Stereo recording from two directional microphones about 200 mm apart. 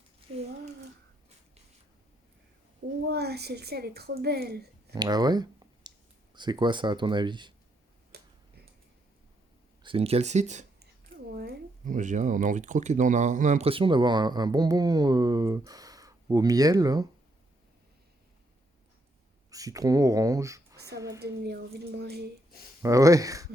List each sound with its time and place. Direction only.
3.1 s a woman's voice: 55° right (ahead or behind)
4.9 s speech: 20° right (ahead or behind)
8.1 s tick-tock: 55° right (ahead or behind)
9.8 s speech: 30° right (ahead or behind)
19.5 s speech: 15° right (ahead or behind)
21.2 s a woman's voice: 55° right (ahead or behind)
22.8 s speech: 15° right (ahead or behind)